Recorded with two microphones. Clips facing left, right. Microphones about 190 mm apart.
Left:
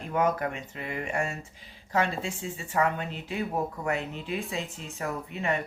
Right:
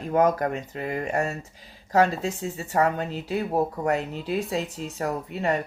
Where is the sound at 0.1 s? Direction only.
40° right (ahead or behind).